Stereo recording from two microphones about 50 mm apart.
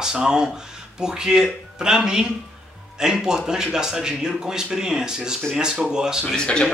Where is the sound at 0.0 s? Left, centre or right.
Centre.